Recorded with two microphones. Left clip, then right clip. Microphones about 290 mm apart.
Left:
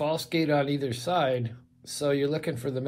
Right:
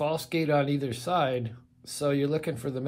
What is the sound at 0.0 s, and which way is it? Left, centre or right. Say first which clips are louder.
Speech: left 1 dB; centre.